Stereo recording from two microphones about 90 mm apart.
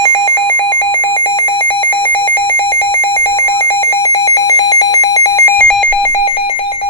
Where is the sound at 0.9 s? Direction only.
65° left (ahead or behind).